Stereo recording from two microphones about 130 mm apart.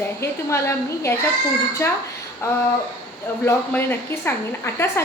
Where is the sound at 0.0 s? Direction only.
20° left (ahead or behind).